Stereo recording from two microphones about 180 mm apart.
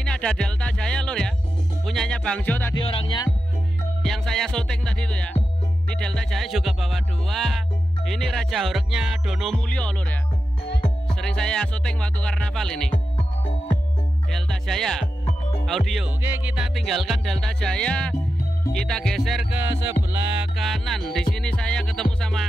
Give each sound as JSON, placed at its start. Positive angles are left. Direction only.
{"t": 0.0, "sound": "music", "side_deg": 5}
{"t": 2.8, "sound": "music", "side_deg": 30}
{"t": 4.0, "sound": "music", "side_deg": 5}
{"t": 11.1, "sound": "music", "side_deg": 5}
{"t": 14.3, "sound": "music", "side_deg": 0}
{"t": 16.2, "sound": "music", "side_deg": -10}
{"t": 19.7, "sound": "music", "side_deg": -15}
{"t": 20.5, "sound": "music", "side_deg": 0}